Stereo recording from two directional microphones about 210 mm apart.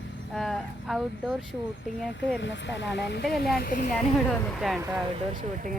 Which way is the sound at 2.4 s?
60° left (ahead or behind).